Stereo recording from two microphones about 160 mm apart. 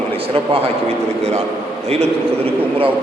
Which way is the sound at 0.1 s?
35° right (ahead or behind).